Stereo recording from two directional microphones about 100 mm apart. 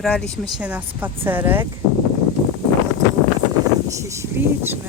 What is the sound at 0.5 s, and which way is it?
Speech, 15° right (ahead or behind).